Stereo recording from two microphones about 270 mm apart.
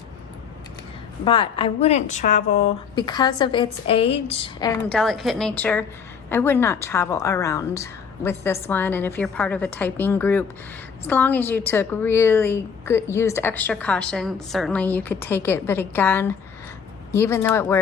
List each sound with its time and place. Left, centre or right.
1.2 s a woman's voice: centre
4.9 s a woman's voice: centre